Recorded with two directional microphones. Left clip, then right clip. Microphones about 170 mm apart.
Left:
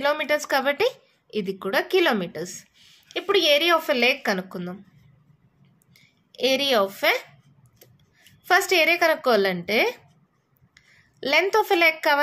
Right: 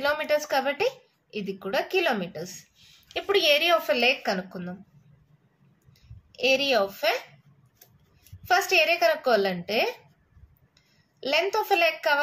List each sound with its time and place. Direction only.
0.0 s a woman's voice: 40° left (ahead or behind)
6.3 s a woman's voice: 45° left (ahead or behind)
8.5 s a woman's voice: 45° left (ahead or behind)